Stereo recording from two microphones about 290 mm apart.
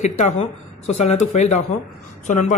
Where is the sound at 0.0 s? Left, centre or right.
Left.